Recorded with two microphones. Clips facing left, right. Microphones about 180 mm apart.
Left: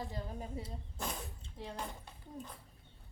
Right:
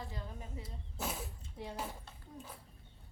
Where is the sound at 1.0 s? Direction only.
5° right (ahead or behind).